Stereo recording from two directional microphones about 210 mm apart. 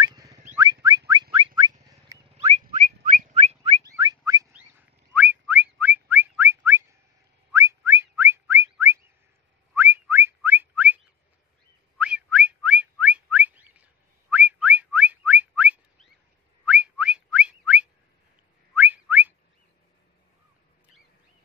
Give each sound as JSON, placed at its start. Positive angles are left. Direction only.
{"t": 0.0, "sound": "whistling", "side_deg": -15}
{"t": 1.3, "sound": "a sound", "side_deg": -20}
{"t": 2.3, "sound": "whistling", "side_deg": -30}
{"t": 3.8, "sound": "a sound", "side_deg": -20}
{"t": 5.1, "sound": "whistling", "side_deg": -5}
{"t": 12.0, "sound": "whistling", "side_deg": -5}